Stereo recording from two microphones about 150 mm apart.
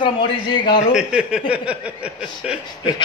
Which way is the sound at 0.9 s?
5° right (ahead or behind).